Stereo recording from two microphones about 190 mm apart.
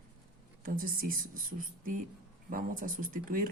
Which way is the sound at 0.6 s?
45° right (ahead or behind).